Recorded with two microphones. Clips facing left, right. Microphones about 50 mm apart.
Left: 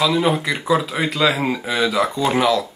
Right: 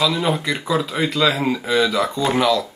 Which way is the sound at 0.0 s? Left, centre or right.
Centre.